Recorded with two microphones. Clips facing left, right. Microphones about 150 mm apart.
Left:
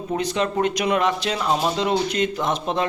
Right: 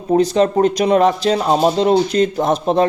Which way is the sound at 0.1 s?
35° right (ahead or behind).